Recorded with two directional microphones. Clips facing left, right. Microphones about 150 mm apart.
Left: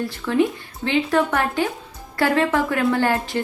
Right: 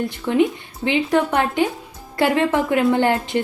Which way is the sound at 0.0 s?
20° right (ahead or behind).